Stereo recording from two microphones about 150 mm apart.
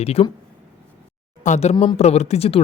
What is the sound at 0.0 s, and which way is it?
Speech, 40° left (ahead or behind).